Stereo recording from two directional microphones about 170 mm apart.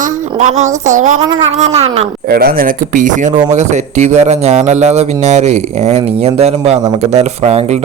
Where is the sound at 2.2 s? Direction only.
65° right (ahead or behind).